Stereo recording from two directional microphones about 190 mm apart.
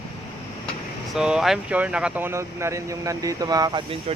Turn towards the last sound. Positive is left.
turn(degrees=-20)  # may be behind; listen again after turning